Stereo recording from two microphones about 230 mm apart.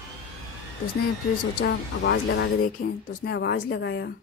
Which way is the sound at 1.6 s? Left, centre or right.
Left.